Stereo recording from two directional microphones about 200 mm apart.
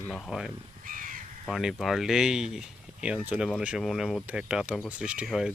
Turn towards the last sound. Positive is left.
turn(degrees=-5)  # may be behind; listen again after turning